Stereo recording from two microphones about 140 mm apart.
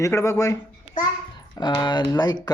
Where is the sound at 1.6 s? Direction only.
30° left (ahead or behind).